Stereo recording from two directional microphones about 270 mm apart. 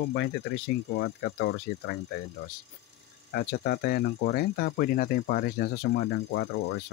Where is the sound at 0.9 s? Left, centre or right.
Left.